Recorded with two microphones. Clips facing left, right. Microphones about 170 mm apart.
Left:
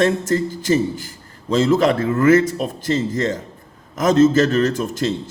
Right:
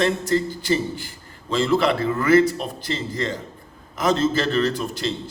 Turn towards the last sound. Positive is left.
turn(degrees=45)  # may be behind; listen again after turning